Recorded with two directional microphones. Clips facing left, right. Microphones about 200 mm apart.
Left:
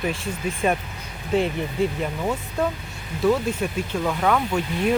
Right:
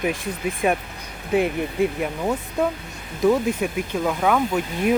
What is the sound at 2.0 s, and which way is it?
Speech, 10° right (ahead or behind).